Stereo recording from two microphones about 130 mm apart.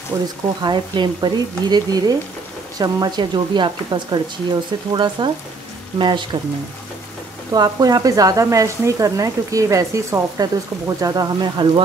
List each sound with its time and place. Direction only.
0.6 s speech: 35° right (ahead or behind)
7.5 s speech: 30° right (ahead or behind)